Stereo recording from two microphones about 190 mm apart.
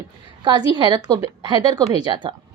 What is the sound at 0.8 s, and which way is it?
A woman's voice, 25° right (ahead or behind).